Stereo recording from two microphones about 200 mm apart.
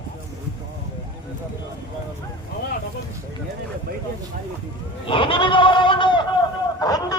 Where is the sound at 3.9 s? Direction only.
50° right (ahead or behind).